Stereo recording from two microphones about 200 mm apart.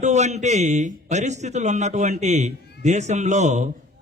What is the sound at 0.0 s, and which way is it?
A man's voice, 35° right (ahead or behind).